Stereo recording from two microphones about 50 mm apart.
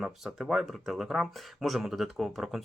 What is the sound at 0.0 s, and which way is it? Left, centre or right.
Speech, centre.